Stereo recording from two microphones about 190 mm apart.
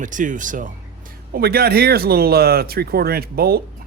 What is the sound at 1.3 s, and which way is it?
Speech, 55° right (ahead or behind).